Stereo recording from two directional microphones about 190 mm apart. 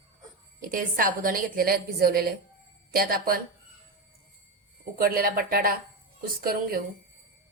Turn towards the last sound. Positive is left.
turn(degrees=-50)  # may be behind; listen again after turning